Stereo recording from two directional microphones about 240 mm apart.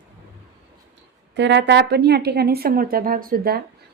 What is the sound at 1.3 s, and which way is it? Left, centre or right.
A woman's voice, right.